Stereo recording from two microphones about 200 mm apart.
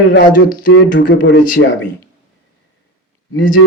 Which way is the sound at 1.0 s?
65° left (ahead or behind).